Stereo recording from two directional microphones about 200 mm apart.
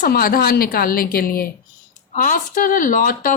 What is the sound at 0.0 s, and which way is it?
Speech, 45° left (ahead or behind).